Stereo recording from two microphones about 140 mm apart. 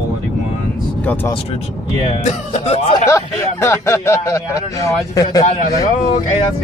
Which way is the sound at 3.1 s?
20° left (ahead or behind).